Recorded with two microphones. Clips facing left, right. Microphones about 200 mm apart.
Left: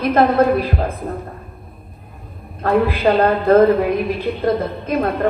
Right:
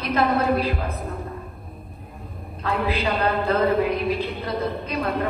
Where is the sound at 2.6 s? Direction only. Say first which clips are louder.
Left 8 dB; 50° left (ahead or behind).